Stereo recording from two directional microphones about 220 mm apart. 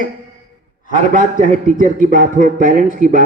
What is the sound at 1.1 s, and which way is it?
Speech, 35° right (ahead or behind).